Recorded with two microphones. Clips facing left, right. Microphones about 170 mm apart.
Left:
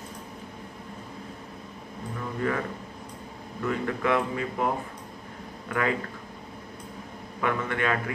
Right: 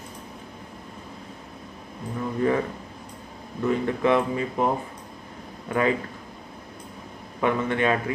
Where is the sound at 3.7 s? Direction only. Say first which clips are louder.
Right 4 dB; 20° right (ahead or behind).